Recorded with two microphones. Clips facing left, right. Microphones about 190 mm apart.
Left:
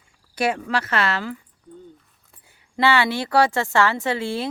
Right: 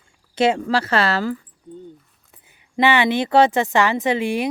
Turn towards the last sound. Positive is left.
turn(degrees=-15)  # may be behind; listen again after turning